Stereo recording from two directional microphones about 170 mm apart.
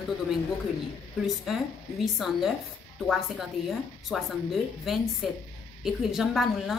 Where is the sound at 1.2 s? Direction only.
Centre (ahead or behind).